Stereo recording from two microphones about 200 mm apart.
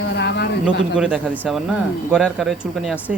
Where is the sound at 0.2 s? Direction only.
60° left (ahead or behind).